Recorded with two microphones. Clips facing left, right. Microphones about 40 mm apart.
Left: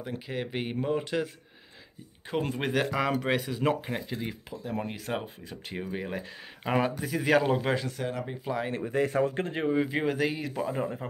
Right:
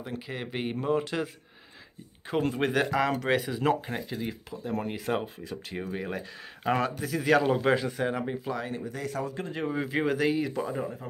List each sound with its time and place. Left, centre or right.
0.0 s speech: centre
4.8 s speech: centre
5.1 s speech: centre
8.8 s speech: left
9.7 s speech: centre
10.7 s speech: left